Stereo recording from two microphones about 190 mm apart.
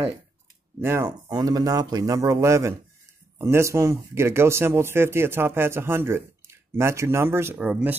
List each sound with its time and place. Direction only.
0.7 s speech: 15° right (ahead or behind)